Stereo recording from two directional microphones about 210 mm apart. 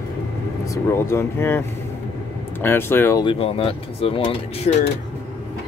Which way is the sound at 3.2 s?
25° left (ahead or behind).